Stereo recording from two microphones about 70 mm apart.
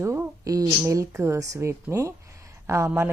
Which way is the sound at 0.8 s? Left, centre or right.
Right.